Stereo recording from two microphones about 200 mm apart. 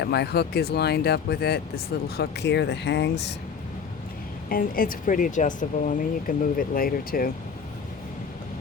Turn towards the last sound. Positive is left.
turn(degrees=45)  # may be behind; listen again after turning